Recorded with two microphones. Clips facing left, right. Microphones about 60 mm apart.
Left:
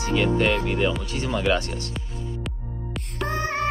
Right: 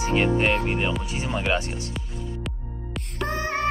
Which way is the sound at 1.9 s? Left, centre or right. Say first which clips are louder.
Even; centre.